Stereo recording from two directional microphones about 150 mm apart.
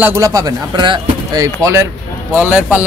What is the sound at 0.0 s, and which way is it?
Speech, 20° right (ahead or behind).